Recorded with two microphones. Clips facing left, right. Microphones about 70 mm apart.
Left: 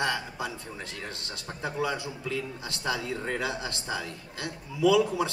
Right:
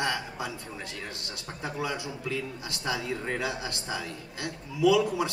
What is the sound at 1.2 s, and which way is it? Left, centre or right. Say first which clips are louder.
Speech: left 1 dB; left.